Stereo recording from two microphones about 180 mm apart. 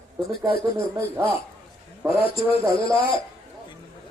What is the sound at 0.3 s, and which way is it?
Speech, 60° left (ahead or behind).